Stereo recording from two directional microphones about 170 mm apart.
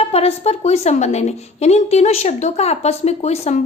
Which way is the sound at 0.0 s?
35° left (ahead or behind).